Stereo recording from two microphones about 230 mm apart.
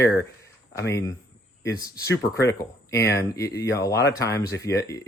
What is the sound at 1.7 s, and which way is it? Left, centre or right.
Speech, centre.